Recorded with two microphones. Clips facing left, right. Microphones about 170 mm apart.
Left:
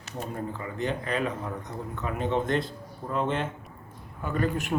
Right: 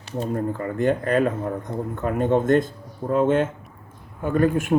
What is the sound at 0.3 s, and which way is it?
Speech, 50° right (ahead or behind).